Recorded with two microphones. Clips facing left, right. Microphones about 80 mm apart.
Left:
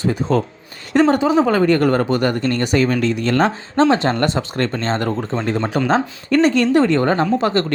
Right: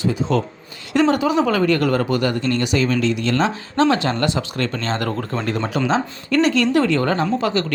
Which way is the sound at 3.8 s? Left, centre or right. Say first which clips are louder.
Left 2 dB; left.